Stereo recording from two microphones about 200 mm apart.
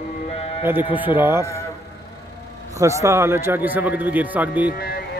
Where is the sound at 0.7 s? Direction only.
10° right (ahead or behind).